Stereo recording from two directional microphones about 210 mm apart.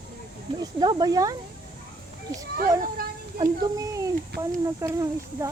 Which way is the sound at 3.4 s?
20° right (ahead or behind).